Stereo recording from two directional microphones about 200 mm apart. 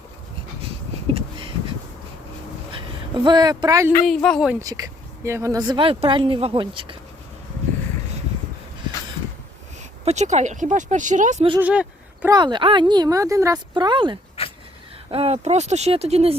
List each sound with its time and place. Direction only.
3.2 s speech: 20° right (ahead or behind)
4.0 s speech: centre (ahead or behind)
4.6 s speech: 15° right (ahead or behind)
10.0 s speech: 35° right (ahead or behind)
11.6 s speech: 5° right (ahead or behind)
12.3 s speech: 20° right (ahead or behind)
14.4 s a sound: 30° left (ahead or behind)
15.1 s speech: 30° right (ahead or behind)